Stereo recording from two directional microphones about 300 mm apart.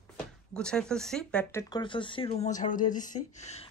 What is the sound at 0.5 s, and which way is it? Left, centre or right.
Speech, centre.